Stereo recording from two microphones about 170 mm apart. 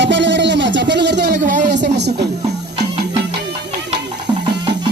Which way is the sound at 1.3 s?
50° right (ahead or behind).